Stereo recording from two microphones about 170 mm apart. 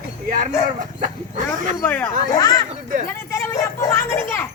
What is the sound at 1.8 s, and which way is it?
Speech, 15° left (ahead or behind).